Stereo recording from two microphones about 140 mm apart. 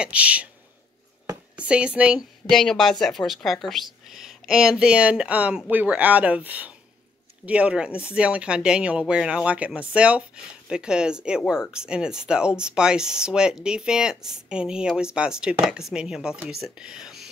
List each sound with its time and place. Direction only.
0.0 s speech: 10° right (ahead or behind)
1.6 s speech: 10° right (ahead or behind)